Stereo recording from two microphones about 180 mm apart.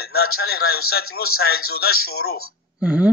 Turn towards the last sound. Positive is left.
turn(degrees=-5)  # may be behind; listen again after turning